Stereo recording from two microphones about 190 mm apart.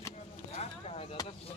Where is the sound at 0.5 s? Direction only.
35° left (ahead or behind).